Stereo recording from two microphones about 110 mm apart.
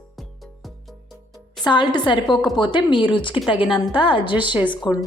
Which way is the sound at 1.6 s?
45° left (ahead or behind).